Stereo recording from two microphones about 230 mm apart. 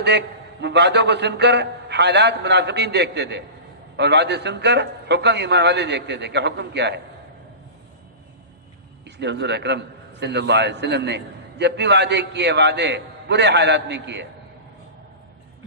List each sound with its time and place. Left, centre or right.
0.0 s a man's voice: right
9.0 s a man's voice: right